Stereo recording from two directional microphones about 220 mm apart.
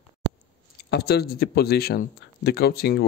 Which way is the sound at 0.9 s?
45° left (ahead or behind).